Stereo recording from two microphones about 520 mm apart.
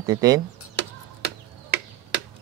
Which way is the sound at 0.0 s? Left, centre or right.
Centre.